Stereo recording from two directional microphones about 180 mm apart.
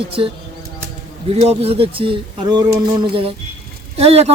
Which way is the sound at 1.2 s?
35° right (ahead or behind).